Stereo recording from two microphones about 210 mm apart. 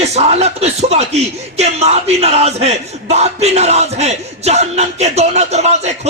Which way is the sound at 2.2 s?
30° right (ahead or behind).